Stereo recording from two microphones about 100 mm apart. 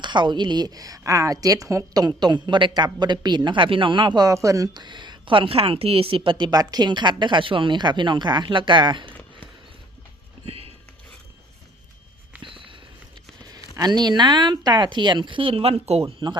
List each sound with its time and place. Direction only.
0.0 s speech: 50° right (ahead or behind); by 4.7 s 30° right (ahead or behind)
4.7 s speech: 50° right (ahead or behind)
10.4 s a sound: 80° right
12.4 s walk: 60° right (ahead or behind)
13.7 s speech: 40° right (ahead or behind); by 16.1 s 75° right (ahead or behind)